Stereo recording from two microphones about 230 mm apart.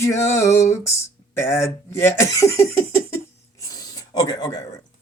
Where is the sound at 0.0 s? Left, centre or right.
Centre.